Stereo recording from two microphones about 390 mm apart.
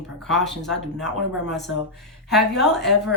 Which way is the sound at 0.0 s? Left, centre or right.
Centre.